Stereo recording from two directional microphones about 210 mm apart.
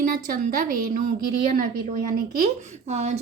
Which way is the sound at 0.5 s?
40° right (ahead or behind).